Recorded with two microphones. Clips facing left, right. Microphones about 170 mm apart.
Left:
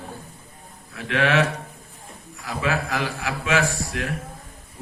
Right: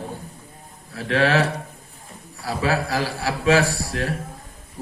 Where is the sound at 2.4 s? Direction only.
35° right (ahead or behind).